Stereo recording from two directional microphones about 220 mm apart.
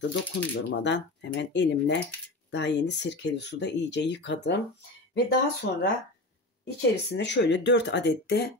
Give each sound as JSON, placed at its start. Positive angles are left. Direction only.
{"t": 0.1, "sound": "speech", "side_deg": 55}